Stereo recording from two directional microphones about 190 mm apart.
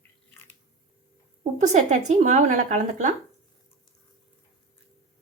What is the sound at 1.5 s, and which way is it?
Speech, 40° right (ahead or behind).